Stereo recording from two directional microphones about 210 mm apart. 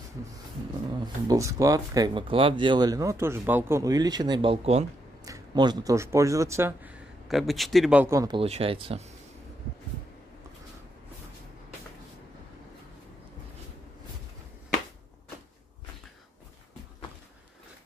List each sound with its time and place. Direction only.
1.0 s speech: 15° right (ahead or behind)